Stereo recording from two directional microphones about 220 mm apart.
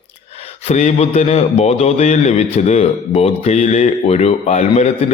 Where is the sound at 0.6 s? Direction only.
30° left (ahead or behind).